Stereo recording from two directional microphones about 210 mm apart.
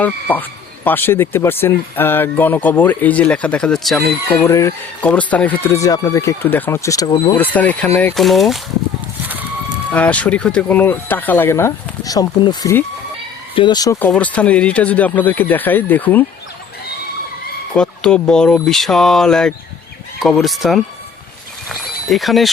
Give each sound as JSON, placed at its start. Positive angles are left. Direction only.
{"t": 0.0, "sound": "speech", "side_deg": 10}
{"t": 4.4, "sound": "speech", "side_deg": 15}
{"t": 7.3, "sound": "speech", "side_deg": 10}
{"t": 9.2, "sound": "a sound", "side_deg": -10}
{"t": 9.9, "sound": "speech", "side_deg": 5}
{"t": 17.7, "sound": "speech", "side_deg": 5}